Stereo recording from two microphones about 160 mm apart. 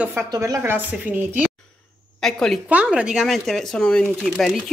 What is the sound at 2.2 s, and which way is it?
Speech, centre (ahead or behind).